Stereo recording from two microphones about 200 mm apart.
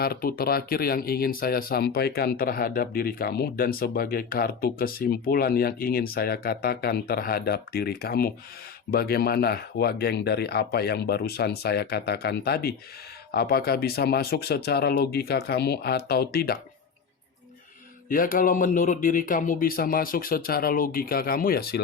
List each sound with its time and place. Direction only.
0.0 s speech: 45° left (ahead or behind)
18.1 s speech: 45° left (ahead or behind)